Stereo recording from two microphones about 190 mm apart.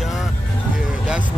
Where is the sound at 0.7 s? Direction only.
5° right (ahead or behind).